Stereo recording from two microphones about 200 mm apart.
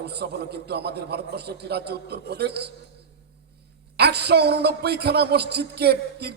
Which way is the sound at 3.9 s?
55° right (ahead or behind).